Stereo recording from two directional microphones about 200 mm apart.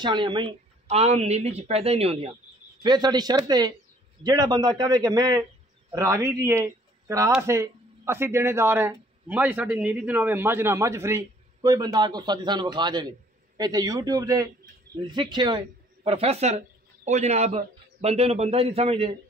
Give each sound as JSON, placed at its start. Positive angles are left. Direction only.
{"t": 0.0, "sound": "a woman's voice", "side_deg": -25}